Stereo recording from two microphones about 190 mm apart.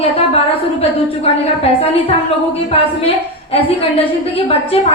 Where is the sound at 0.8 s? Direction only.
30° left (ahead or behind).